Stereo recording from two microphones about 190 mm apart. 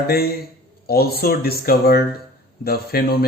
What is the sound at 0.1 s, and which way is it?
Speech, 50° left (ahead or behind).